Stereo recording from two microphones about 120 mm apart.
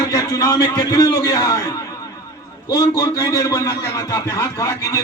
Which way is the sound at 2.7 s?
30° left (ahead or behind).